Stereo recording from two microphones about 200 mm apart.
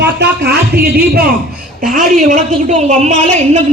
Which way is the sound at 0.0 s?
55° right (ahead or behind).